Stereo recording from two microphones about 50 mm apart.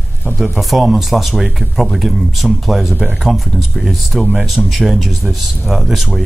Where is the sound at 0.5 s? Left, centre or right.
Centre.